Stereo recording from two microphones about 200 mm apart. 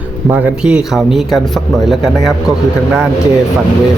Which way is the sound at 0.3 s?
10° right (ahead or behind).